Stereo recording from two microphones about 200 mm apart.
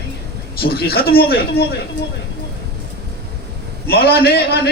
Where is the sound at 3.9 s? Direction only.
50° left (ahead or behind).